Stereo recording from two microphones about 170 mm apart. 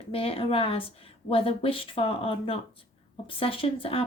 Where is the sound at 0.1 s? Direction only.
35° left (ahead or behind).